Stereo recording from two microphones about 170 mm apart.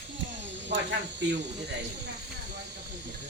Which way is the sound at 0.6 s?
90° right.